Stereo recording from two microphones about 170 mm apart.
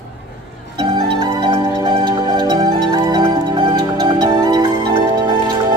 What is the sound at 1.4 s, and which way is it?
Music, 25° right (ahead or behind).